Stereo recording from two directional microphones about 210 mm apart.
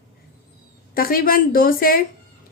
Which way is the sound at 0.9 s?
45° left (ahead or behind).